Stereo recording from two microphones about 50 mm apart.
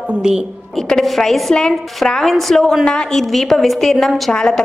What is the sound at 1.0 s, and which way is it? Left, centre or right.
A woman's voice, centre.